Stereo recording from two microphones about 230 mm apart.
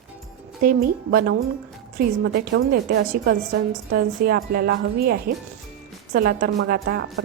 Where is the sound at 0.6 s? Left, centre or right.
Right.